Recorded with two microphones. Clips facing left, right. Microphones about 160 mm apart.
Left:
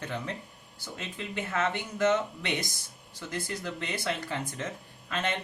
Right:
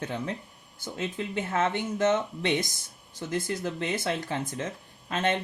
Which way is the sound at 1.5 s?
25° right (ahead or behind).